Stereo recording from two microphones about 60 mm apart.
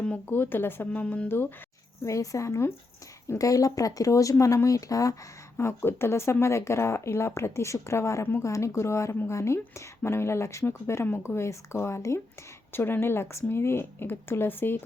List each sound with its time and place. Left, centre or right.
0.3 s speech: left
0.9 s speech: left
1.3 s speech: left
2.0 s speech: left
3.3 s speech: left